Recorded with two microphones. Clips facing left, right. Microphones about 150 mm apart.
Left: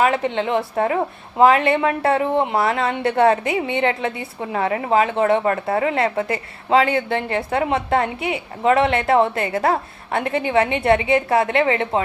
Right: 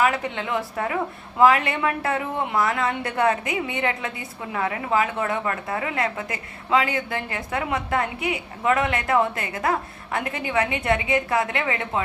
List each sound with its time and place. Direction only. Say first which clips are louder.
0.0 s a woman's voice: left 4 dB; 25° left (ahead or behind)